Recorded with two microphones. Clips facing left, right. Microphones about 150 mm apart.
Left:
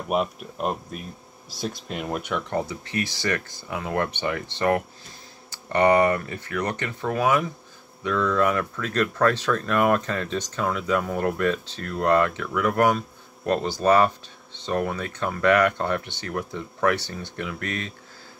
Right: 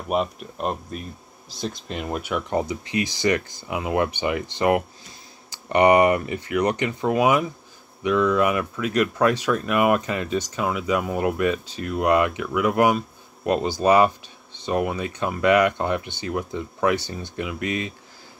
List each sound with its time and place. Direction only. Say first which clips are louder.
0.1 s speech: right 1 dB; centre (ahead or behind)
2.5 s speech: right 5 dB; 15° right (ahead or behind)